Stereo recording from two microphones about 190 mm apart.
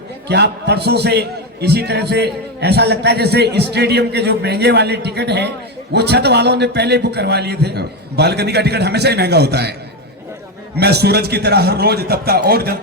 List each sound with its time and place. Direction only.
0.3 s a man's voice: 60° right (ahead or behind)
10.8 s a man's voice: 60° right (ahead or behind)